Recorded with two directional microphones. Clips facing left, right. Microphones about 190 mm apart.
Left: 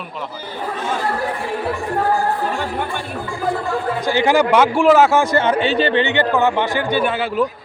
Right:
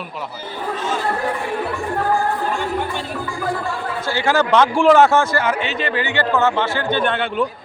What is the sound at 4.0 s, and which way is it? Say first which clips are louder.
Speech: left 3 dB; 15° left (ahead or behind).